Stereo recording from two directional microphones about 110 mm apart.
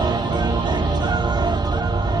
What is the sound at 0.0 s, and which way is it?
Music, 40° right (ahead or behind).